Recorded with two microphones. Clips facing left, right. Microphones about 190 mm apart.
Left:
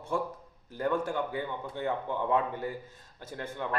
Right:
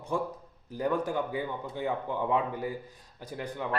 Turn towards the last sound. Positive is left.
turn(degrees=-15)  # may be behind; listen again after turning